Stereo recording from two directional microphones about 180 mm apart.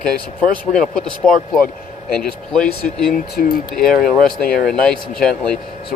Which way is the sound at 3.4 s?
55° left (ahead or behind).